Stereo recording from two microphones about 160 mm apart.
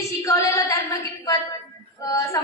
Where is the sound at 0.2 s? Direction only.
20° left (ahead or behind).